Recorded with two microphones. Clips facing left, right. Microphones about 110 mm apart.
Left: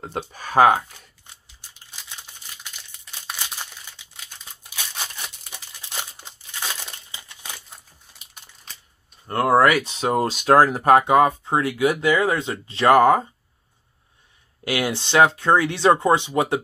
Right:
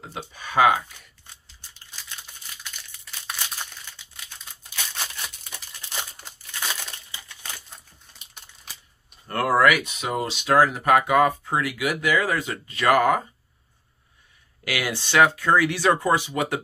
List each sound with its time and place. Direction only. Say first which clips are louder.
0.1 s speech: left 5 dB; 45° left (ahead or behind)
7.1 s crumpling: left 1 dB; 15° left (ahead or behind)
9.3 s speech: left 3 dB; 25° left (ahead or behind)
10.0 s speech: left 7 dB; 40° left (ahead or behind)
14.6 s speech: left 4 dB; 25° left (ahead or behind)